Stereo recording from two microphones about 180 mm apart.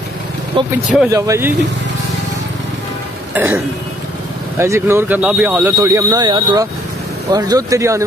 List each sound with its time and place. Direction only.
0.5 s speech: 25° right (ahead or behind)
3.3 s speech: 10° right (ahead or behind)